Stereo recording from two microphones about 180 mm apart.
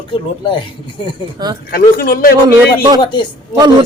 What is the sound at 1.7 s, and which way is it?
Speech, 55° left (ahead or behind).